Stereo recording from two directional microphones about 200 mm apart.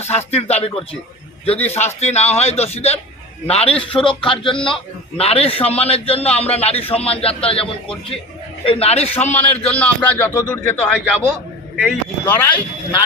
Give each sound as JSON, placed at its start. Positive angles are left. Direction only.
{"t": 0.0, "sound": "a man's voice", "side_deg": 30}
{"t": 9.7, "sound": "speech", "side_deg": 5}